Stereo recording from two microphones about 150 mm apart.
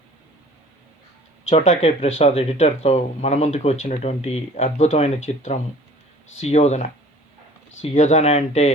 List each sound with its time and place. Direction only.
1.5 s speech: 50° left (ahead or behind)